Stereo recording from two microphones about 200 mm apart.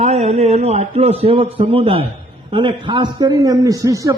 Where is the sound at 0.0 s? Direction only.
35° right (ahead or behind).